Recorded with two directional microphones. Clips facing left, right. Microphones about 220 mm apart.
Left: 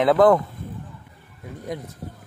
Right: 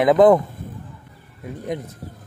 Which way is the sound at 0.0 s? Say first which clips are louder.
Right 3 dB; 15° right (ahead or behind).